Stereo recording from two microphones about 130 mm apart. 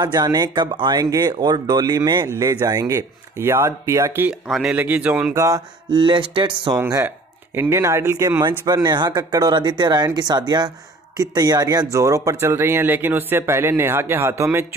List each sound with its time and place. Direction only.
0.0 s a man's voice: 30° right (ahead or behind); by 5.3 s 10° right (ahead or behind)
5.3 s speech: 25° right (ahead or behind)
6.8 s speech: 20° right (ahead or behind)
8.5 s speech: 30° right (ahead or behind)